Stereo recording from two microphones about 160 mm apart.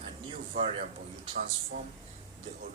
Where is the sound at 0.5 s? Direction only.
40° right (ahead or behind).